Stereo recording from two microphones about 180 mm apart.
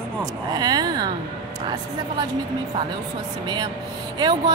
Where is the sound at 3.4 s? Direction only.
25° right (ahead or behind).